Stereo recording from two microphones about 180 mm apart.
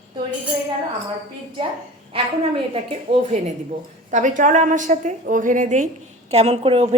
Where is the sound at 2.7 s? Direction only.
35° right (ahead or behind).